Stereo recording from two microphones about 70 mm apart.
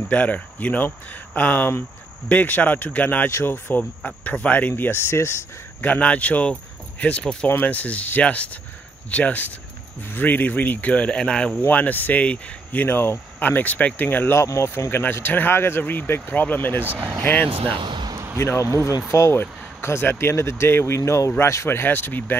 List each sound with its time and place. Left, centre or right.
0.1 s speech: centre
3.3 s speech: left
4.0 s speech: centre; by 5.9 s left
5.9 s speech: centre
7.4 s speech: left
11.6 s speech: left
14.4 s speech: left
17.9 s a sound: right
18.4 s speech: left